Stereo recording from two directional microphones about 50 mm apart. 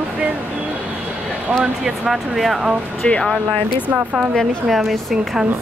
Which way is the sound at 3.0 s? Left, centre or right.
Centre.